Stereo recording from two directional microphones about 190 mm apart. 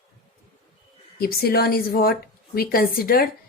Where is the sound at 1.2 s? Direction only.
55° left (ahead or behind).